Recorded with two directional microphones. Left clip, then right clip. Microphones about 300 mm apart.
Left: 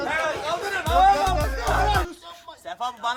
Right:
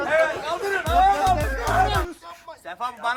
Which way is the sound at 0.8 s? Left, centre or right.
Centre.